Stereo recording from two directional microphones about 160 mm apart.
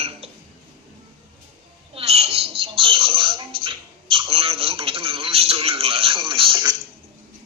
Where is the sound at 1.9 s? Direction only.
40° right (ahead or behind).